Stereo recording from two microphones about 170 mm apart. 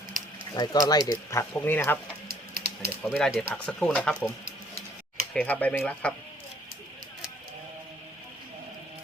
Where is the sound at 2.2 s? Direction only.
60° right (ahead or behind).